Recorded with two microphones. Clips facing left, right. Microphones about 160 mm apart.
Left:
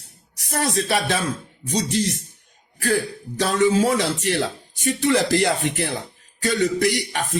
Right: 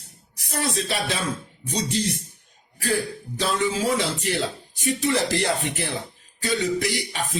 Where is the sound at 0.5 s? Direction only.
55° left (ahead or behind).